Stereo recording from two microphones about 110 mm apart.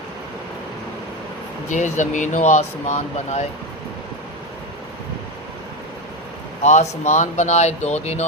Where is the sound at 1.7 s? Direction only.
90° left.